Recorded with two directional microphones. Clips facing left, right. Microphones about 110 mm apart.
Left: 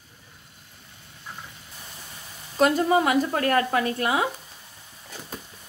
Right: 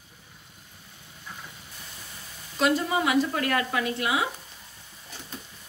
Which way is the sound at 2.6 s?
45° left (ahead or behind).